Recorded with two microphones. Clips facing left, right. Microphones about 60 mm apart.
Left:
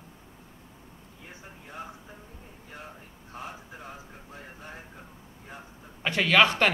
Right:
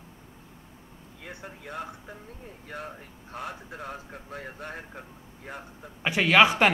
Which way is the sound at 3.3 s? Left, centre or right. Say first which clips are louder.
Right 4 dB; right.